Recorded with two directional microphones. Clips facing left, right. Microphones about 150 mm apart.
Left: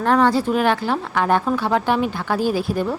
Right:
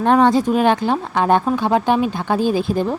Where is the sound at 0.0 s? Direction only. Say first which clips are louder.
Right 3 dB; 20° right (ahead or behind).